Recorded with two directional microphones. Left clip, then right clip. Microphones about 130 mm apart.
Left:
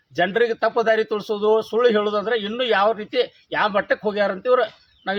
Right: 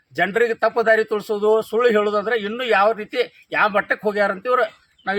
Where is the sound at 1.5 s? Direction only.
25° left (ahead or behind).